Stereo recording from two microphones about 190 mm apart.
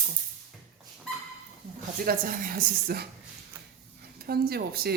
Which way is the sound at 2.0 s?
45° right (ahead or behind).